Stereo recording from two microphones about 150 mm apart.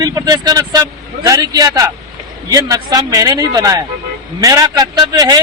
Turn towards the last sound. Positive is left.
turn(degrees=-25)  # may be behind; listen again after turning